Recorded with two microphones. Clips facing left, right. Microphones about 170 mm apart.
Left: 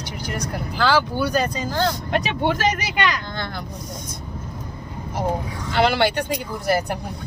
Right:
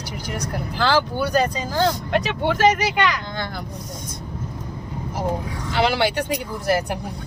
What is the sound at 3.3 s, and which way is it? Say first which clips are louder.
Speech: right 1 dB; 10° right (ahead or behind).